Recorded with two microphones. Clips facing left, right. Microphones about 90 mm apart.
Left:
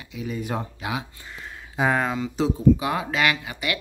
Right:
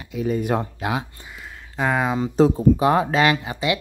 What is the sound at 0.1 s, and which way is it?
Speech, 50° right (ahead or behind).